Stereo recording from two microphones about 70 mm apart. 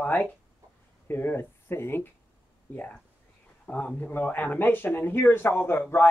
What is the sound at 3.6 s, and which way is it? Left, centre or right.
Speech, centre.